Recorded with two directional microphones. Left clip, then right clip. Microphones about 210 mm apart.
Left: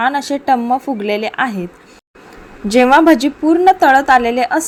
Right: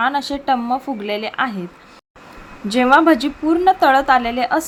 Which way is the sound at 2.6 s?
15° left (ahead or behind).